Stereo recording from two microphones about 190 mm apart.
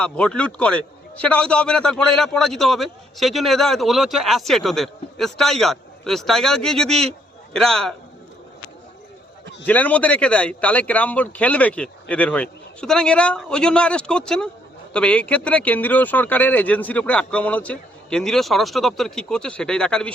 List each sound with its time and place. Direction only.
0.0 s a man's voice: 5° left (ahead or behind)
9.6 s a man's voice: 10° left (ahead or behind)